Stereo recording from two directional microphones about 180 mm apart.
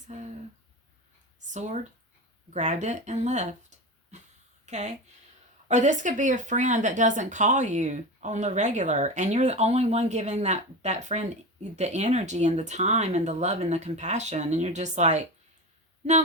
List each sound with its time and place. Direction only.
0.1 s speech: 40° right (ahead or behind)
1.5 s speech: 40° right (ahead or behind)